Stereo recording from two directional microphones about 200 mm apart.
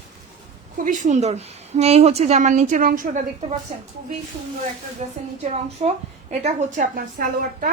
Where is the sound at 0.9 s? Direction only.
40° right (ahead or behind).